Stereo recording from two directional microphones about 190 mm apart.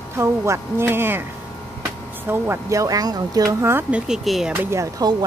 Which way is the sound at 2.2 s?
10° right (ahead or behind).